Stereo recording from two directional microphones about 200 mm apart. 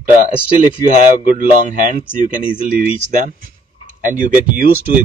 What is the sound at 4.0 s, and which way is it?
Speech, 40° right (ahead or behind).